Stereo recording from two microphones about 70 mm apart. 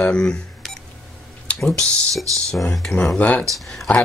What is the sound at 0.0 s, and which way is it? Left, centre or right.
Speech, centre.